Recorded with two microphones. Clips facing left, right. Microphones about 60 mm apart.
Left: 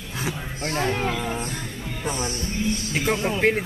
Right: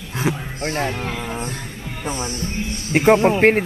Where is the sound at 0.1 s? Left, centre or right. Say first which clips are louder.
Right 7 dB; right.